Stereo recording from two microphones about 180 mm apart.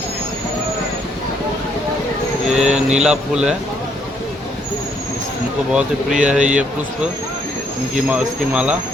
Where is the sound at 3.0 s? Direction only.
5° right (ahead or behind).